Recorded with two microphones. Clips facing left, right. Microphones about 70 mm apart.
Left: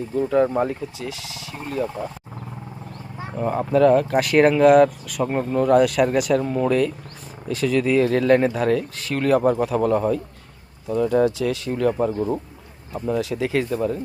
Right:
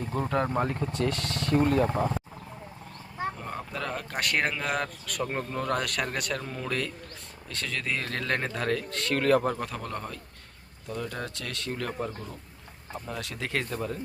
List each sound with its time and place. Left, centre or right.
0.2 s speech: centre
1.8 s speech: right
3.3 s speech: centre